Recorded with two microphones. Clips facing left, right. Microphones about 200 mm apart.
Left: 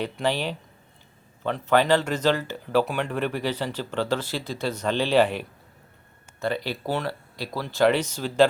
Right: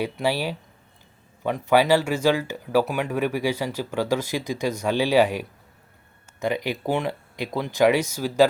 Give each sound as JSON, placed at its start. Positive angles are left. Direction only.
{"t": 0.0, "sound": "speech", "side_deg": -10}